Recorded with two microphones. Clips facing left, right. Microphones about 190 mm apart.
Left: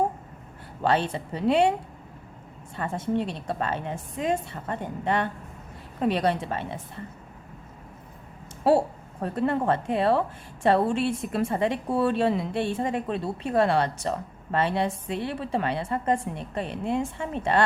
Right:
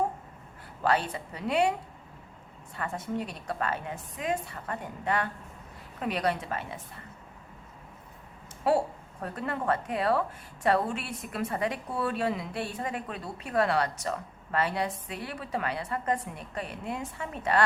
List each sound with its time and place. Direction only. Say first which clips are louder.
0.8 s a woman's voice: left 3 dB; 25° left (ahead or behind)
2.7 s a woman's voice: left 6 dB; 25° left (ahead or behind)
8.7 s a woman's voice: left 5 dB; 30° left (ahead or behind)